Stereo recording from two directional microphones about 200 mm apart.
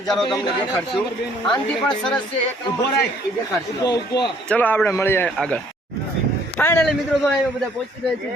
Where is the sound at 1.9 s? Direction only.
5° left (ahead or behind).